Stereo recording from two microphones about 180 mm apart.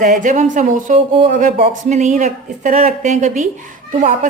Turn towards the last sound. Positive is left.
turn(degrees=-45)  # may be behind; listen again after turning